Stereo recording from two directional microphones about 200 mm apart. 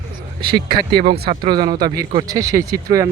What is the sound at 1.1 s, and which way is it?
Speech, 25° right (ahead or behind).